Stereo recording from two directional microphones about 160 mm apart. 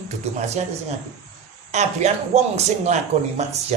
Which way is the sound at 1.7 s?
45° right (ahead or behind).